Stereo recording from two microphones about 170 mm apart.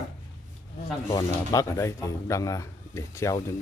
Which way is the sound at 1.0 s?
20° left (ahead or behind).